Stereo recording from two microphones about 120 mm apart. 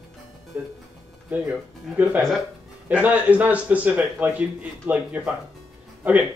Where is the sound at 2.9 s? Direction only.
15° right (ahead or behind).